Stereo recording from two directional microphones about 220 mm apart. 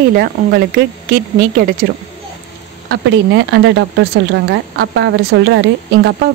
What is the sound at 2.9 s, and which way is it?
Speech, 55° right (ahead or behind).